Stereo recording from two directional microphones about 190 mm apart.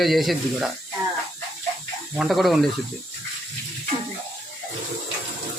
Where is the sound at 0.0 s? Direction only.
Centre (ahead or behind).